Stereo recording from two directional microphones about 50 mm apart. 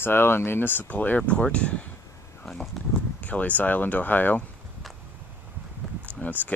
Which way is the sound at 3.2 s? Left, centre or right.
Left.